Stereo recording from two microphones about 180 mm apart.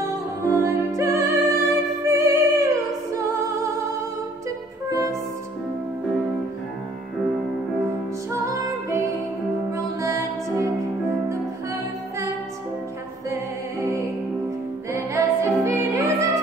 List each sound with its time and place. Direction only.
0.0 s music: 15° right (ahead or behind)
8.3 s music: 20° right (ahead or behind)
13.3 s music: 15° right (ahead or behind)